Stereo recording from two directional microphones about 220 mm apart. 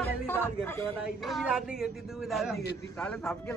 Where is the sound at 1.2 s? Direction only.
Centre (ahead or behind).